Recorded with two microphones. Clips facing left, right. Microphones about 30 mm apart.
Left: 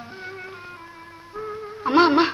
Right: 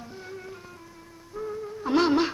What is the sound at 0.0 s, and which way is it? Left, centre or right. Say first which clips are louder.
Music: left 4 dB; left.